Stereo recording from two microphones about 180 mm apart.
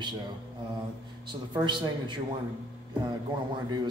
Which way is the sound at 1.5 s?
25° right (ahead or behind).